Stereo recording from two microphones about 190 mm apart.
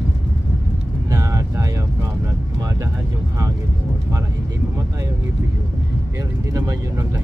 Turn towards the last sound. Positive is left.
turn(degrees=-20)  # may be behind; listen again after turning